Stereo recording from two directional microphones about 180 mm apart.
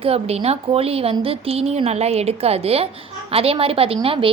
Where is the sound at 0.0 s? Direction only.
35° right (ahead or behind).